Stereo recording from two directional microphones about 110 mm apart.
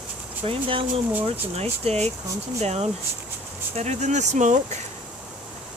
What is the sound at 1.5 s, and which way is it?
Speech, 70° right (ahead or behind).